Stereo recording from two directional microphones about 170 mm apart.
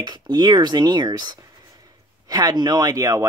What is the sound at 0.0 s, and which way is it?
Speech, 25° right (ahead or behind).